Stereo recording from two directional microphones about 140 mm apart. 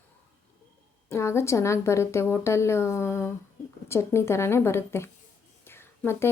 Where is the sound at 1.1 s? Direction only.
20° left (ahead or behind).